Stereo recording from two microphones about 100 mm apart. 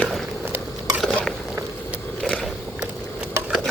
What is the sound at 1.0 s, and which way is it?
Stir, 5° left (ahead or behind).